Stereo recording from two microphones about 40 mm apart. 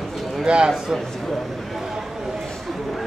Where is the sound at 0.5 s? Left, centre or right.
Right.